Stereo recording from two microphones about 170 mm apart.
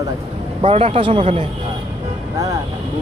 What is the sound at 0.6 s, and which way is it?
Speech, 35° right (ahead or behind).